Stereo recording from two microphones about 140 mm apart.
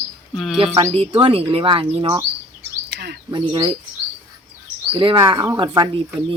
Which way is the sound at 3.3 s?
35° right (ahead or behind).